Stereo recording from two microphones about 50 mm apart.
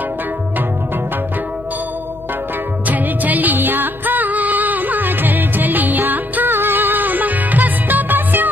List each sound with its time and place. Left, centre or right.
2.9 s music: right